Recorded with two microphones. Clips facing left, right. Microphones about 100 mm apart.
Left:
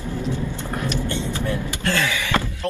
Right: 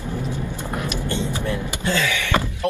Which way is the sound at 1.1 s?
15° right (ahead or behind).